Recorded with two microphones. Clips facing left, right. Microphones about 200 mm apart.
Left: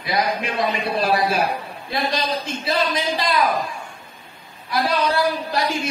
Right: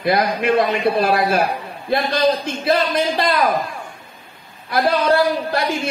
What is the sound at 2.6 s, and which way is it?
Speech, 55° right (ahead or behind).